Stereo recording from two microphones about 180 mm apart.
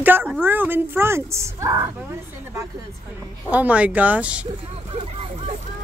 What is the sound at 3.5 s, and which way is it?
A woman's voice, 10° right (ahead or behind).